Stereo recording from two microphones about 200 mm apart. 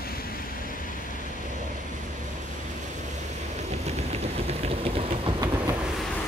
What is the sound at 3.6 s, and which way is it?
Vehicle, 35° right (ahead or behind).